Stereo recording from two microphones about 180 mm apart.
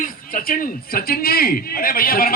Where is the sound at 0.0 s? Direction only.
50° left (ahead or behind).